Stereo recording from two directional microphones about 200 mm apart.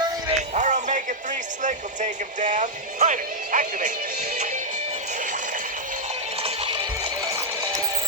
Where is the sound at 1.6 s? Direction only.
40° right (ahead or behind).